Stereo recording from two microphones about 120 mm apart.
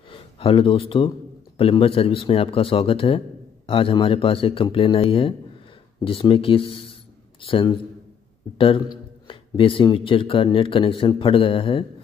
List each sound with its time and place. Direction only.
0.1 s speech: 45° left (ahead or behind)